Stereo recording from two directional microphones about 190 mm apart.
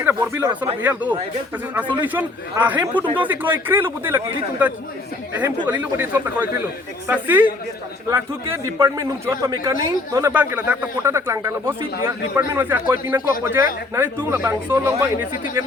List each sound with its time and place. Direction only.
0.0 s a man's voice: 15° right (ahead or behind)
5.4 s a man's voice: 10° right (ahead or behind)